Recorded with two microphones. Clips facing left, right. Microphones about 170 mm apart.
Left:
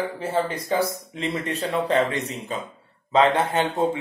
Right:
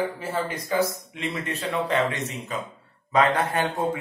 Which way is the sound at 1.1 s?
35° left (ahead or behind).